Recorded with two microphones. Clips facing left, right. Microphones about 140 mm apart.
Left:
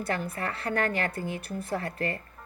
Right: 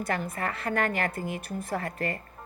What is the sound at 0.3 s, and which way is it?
A woman's voice, 30° left (ahead or behind).